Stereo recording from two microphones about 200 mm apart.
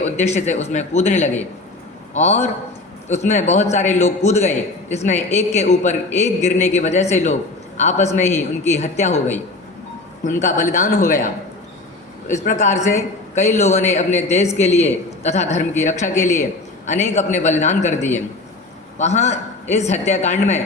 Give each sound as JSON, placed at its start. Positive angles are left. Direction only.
{"t": 0.0, "sound": "a man's voice", "side_deg": 35}
{"t": 10.2, "sound": "a man's voice", "side_deg": 40}
{"t": 12.3, "sound": "a man's voice", "side_deg": 35}